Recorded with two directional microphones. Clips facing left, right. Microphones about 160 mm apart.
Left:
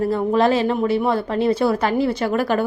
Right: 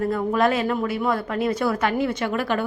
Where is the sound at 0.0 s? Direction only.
30° left (ahead or behind).